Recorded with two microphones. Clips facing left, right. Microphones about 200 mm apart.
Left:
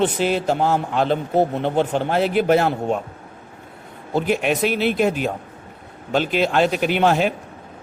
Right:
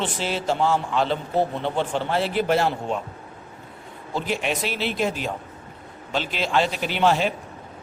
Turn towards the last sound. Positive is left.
turn(degrees=50)  # may be behind; listen again after turning